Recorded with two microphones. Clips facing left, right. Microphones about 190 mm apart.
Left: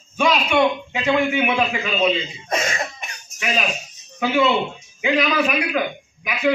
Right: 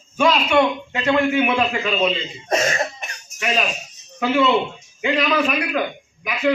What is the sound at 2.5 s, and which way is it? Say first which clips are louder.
Cough: right 4 dB; 40° right (ahead or behind).